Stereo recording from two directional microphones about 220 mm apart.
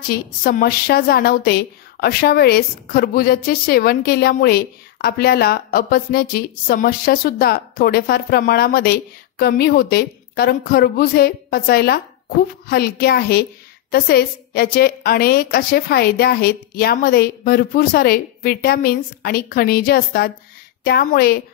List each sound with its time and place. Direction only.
0.1 s a woman's voice: 40° left (ahead or behind)